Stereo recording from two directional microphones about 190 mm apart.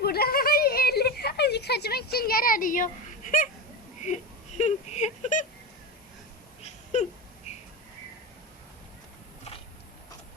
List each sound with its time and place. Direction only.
0.0 s a sound: 55° left (ahead or behind)
4.0 s speech: 40° left (ahead or behind)
6.6 s wail: 35° left (ahead or behind)